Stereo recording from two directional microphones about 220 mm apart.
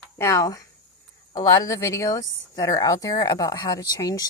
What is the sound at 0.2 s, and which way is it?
Speech, 15° left (ahead or behind).